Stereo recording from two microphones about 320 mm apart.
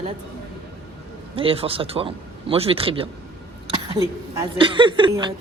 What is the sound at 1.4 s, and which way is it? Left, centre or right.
Speech, centre.